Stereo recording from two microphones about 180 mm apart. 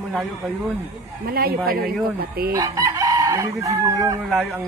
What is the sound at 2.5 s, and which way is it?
Chicken, 20° right (ahead or behind).